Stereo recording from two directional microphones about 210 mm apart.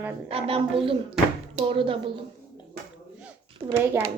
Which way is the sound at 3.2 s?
10° right (ahead or behind).